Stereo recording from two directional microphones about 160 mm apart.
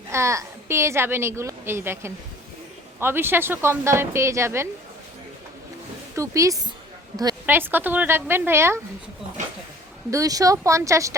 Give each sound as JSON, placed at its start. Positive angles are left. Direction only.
{"t": 0.1, "sound": "a woman's voice", "side_deg": -15}
{"t": 6.1, "sound": "a woman's voice", "side_deg": -20}
{"t": 10.1, "sound": "speech", "side_deg": -20}